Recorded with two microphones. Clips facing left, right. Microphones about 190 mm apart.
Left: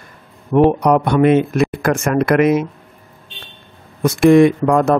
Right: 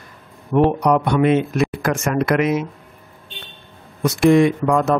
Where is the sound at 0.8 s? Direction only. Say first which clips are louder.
Left 3 dB; 55° left (ahead or behind).